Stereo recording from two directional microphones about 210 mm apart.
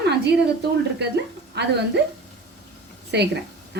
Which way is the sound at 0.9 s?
55° right (ahead or behind).